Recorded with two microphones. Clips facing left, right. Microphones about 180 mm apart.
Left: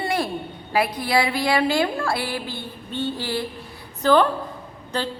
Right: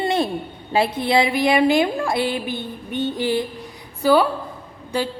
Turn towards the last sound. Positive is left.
turn(degrees=-10)  # may be behind; listen again after turning